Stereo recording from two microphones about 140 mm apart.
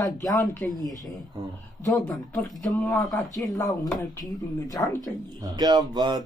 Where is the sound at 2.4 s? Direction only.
5° left (ahead or behind).